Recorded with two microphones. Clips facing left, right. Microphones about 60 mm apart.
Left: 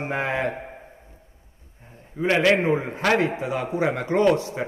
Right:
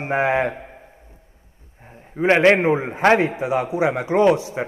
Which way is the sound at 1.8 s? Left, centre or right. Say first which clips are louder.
Right 5 dB; right.